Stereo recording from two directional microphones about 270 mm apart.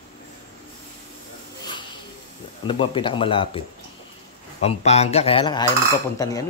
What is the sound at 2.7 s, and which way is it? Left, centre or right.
Speech, centre.